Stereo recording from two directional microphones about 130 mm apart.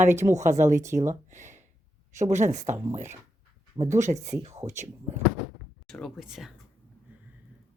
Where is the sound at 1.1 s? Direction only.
70° right (ahead or behind).